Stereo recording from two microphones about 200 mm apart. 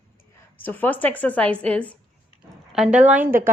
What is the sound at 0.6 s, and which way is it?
A woman's voice, 10° left (ahead or behind).